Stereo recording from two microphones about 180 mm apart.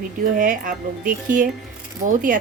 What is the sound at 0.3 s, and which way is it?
Speech, 50° right (ahead or behind).